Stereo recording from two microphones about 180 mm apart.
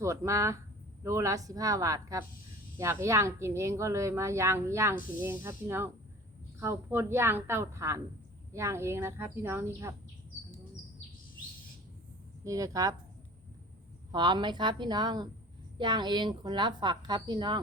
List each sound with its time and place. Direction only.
0.0 s a woman's voice: 15° right (ahead or behind)
12.5 s speech: 20° right (ahead or behind)
14.1 s speech: 25° right (ahead or behind)